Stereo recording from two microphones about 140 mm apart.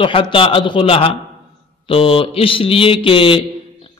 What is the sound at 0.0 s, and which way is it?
Speech, 40° left (ahead or behind).